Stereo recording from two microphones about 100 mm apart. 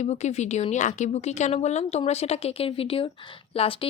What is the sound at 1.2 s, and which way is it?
A woman's voice, 90° left.